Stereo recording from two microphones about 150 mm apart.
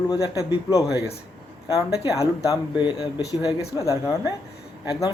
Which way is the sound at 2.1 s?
20° left (ahead or behind).